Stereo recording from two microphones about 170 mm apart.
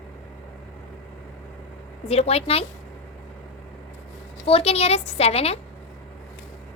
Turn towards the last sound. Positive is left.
turn(degrees=35)  # may be behind; listen again after turning